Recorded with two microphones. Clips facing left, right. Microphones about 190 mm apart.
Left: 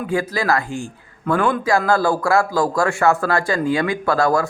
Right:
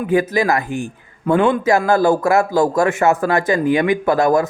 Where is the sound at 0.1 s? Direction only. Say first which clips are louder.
Right 4 dB; 20° right (ahead or behind).